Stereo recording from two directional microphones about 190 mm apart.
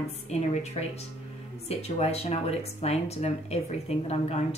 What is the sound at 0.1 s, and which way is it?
Speech, 35° left (ahead or behind).